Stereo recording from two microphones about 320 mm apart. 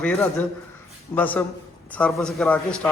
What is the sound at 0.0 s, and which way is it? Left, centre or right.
A man's voice, centre.